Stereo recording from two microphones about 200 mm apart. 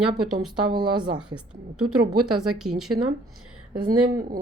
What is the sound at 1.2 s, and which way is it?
Speech, 5° right (ahead or behind).